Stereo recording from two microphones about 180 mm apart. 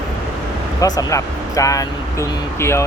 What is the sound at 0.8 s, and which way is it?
Speech, 20° left (ahead or behind).